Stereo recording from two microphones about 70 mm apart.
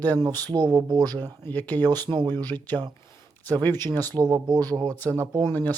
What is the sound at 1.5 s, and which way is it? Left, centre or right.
Speech, left.